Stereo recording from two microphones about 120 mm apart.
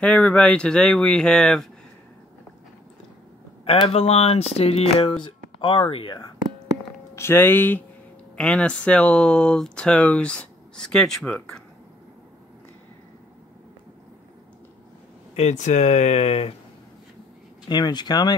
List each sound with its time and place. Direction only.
0.0 s speech: 10° left (ahead or behind)
3.6 s speech: 55° left (ahead or behind)
5.1 s speech: 40° left (ahead or behind)
7.2 s speech: 20° left (ahead or behind)
15.3 s speech: 80° left; by 16.5 s 60° left (ahead or behind)
17.6 s speech: 35° left (ahead or behind)